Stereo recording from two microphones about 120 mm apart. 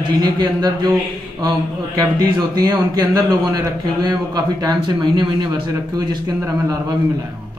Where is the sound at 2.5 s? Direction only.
30° right (ahead or behind).